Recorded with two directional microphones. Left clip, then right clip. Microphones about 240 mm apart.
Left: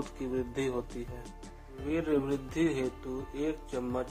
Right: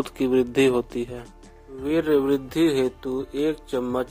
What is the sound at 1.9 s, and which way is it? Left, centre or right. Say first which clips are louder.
Speech: right 10 dB; right.